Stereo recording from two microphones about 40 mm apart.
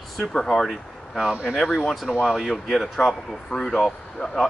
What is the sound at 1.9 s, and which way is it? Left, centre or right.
Speech, centre.